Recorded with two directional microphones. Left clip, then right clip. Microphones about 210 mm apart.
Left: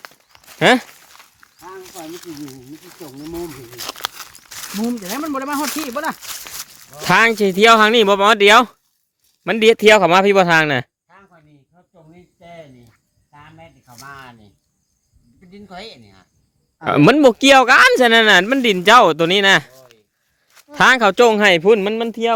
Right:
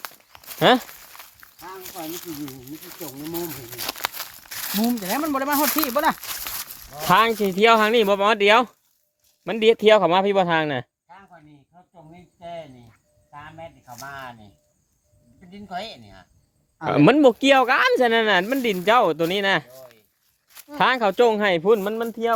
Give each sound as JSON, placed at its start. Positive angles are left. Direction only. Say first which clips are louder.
{"t": 0.6, "sound": "speech", "louder": "left 4 dB", "side_deg": 25}
{"t": 1.5, "sound": "a sound", "louder": "left 2 dB", "side_deg": -15}
{"t": 2.2, "sound": "speech", "louder": "left 1 dB", "side_deg": 0}
{"t": 3.6, "sound": "speech", "louder": "left 2 dB", "side_deg": -5}
{"t": 4.4, "sound": "a sound", "louder": "left 1 dB", "side_deg": -10}
{"t": 4.7, "sound": "speech", "louder": "even", "side_deg": -35}
{"t": 6.5, "sound": "walk", "louder": "left 1 dB", "side_deg": 0}
{"t": 7.1, "sound": "speech", "louder": "left 5 dB", "side_deg": 35}
{"t": 12.4, "sound": "speech", "louder": "right 4 dB", "side_deg": 5}
{"t": 16.8, "sound": "speech", "louder": "left 4 dB", "side_deg": 30}
{"t": 19.7, "sound": "a sound", "louder": "right 2 dB", "side_deg": -5}
{"t": 20.7, "sound": "speech", "louder": "left 7 dB", "side_deg": 35}